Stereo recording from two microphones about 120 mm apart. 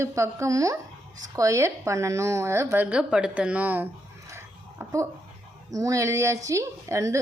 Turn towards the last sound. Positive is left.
turn(degrees=-25)  # may be behind; listen again after turning